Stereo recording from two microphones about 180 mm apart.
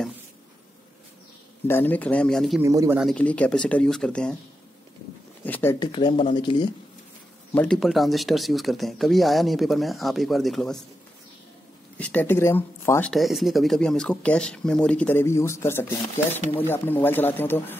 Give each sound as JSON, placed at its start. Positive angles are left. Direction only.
{"t": 1.7, "sound": "speech", "side_deg": 10}
{"t": 2.6, "sound": "speech", "side_deg": -15}
{"t": 3.0, "sound": "speech", "side_deg": 5}
{"t": 5.4, "sound": "a sound", "side_deg": 10}
{"t": 5.8, "sound": "speech", "side_deg": 25}
{"t": 7.5, "sound": "speech", "side_deg": 5}
{"t": 12.0, "sound": "speech", "side_deg": 10}
{"t": 13.1, "sound": "speech", "side_deg": 0}